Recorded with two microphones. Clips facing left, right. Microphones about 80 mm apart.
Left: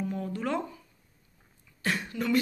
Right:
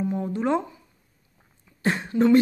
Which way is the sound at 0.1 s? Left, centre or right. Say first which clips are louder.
Right 7 dB; right.